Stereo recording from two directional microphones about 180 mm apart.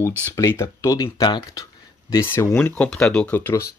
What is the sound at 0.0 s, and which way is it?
Speech, 15° left (ahead or behind).